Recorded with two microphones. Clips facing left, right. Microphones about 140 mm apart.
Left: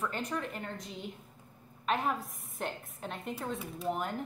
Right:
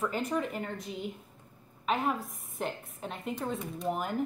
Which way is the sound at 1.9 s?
Centre (ahead or behind).